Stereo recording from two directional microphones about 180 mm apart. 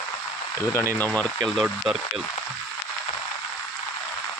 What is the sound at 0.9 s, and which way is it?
Speech, 10° left (ahead or behind).